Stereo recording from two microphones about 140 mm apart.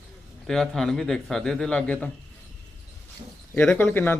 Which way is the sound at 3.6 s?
15° left (ahead or behind).